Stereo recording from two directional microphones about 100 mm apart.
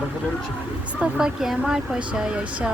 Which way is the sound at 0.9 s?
5° right (ahead or behind).